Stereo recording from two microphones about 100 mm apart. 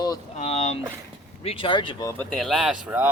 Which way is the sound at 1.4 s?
75° left (ahead or behind).